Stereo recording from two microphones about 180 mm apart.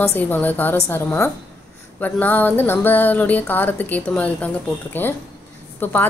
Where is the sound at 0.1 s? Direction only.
10° left (ahead or behind).